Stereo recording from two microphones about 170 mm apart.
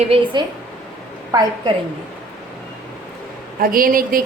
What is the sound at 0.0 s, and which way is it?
Speech, 35° right (ahead or behind).